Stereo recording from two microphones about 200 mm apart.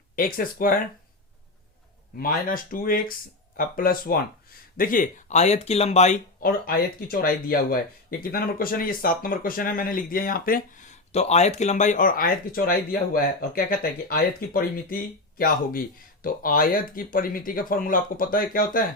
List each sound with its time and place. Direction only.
0.2 s speech: 45° left (ahead or behind)
2.1 s speech: 45° left (ahead or behind)